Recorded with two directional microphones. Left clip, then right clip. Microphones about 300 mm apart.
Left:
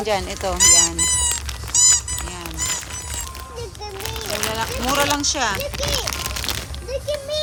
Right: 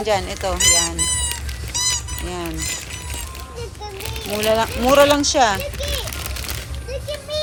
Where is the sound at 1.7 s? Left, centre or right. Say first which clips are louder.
Left 5 dB; left.